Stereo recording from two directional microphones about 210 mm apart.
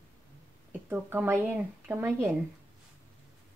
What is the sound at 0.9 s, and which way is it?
Speech, 10° right (ahead or behind).